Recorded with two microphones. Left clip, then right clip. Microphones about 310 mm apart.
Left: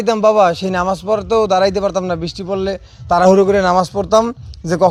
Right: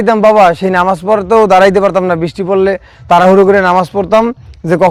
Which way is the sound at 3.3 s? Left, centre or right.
Right.